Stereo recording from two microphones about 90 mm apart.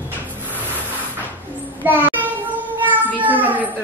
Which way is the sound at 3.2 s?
20° right (ahead or behind).